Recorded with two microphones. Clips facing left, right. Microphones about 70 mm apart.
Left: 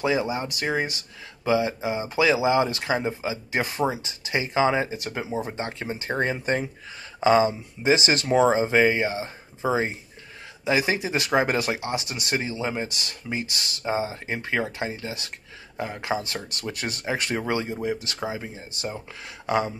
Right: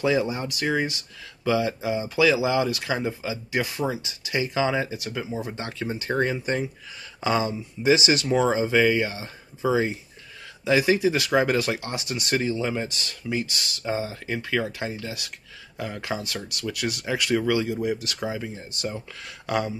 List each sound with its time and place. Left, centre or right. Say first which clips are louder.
0.0 s speech: right 1 dB; left
6.3 s speech: left 1 dB; left
7.2 s speech: left 5 dB; left